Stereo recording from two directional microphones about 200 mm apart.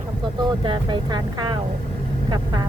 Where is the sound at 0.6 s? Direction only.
25° right (ahead or behind).